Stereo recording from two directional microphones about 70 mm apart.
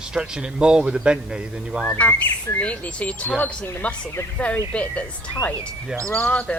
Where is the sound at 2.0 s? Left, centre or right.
Left.